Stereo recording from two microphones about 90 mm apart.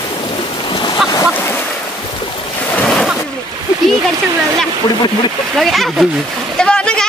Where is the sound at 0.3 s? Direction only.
65° left (ahead or behind).